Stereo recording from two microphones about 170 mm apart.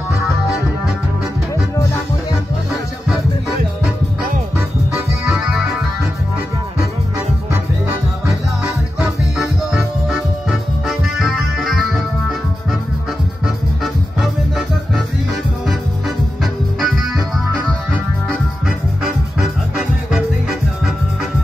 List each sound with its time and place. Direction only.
0.2 s music: centre (ahead or behind)
5.4 s music: 5° right (ahead or behind)
10.9 s music: centre (ahead or behind)
16.8 s music: centre (ahead or behind)
19.0 s music: 5° right (ahead or behind)